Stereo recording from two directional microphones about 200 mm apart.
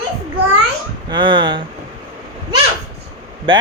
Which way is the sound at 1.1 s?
25° right (ahead or behind).